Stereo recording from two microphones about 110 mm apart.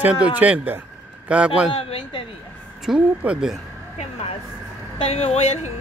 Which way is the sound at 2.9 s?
5° right (ahead or behind).